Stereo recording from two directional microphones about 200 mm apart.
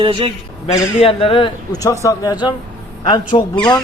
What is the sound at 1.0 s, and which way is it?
Speech, 30° left (ahead or behind).